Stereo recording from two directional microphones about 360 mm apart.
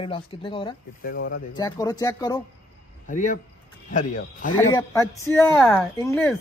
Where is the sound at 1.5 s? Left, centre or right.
Centre.